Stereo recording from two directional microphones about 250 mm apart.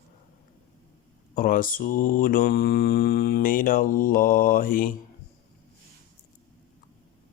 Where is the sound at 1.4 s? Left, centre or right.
Left.